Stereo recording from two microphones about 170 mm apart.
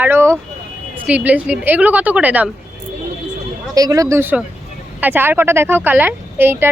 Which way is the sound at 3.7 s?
20° right (ahead or behind).